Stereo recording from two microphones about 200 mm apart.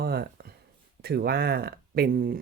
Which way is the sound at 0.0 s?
50° right (ahead or behind).